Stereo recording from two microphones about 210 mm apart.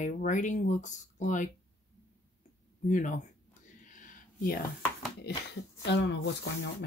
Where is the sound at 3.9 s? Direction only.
40° left (ahead or behind).